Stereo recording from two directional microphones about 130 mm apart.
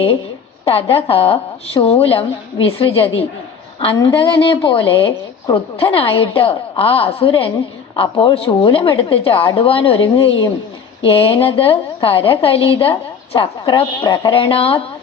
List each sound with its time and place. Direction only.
0.6 s a woman's voice: 45° left (ahead or behind)